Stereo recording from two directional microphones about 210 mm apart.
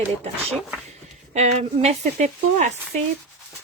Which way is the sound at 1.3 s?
30° right (ahead or behind).